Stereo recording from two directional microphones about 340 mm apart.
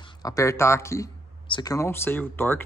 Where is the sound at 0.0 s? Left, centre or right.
Centre.